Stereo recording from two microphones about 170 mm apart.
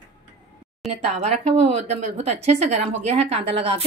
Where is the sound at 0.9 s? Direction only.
35° right (ahead or behind).